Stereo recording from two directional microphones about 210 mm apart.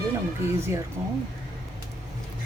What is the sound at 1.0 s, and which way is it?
Speech, 10° right (ahead or behind).